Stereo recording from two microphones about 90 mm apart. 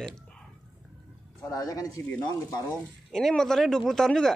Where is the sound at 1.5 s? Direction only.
45° left (ahead or behind).